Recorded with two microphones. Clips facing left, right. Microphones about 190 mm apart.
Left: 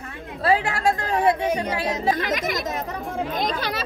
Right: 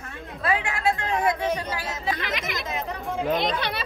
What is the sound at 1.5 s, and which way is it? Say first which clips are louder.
Speech: left 3 dB; 15° left (ahead or behind).